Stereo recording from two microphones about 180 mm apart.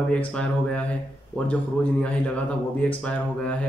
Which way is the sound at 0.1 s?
5° left (ahead or behind).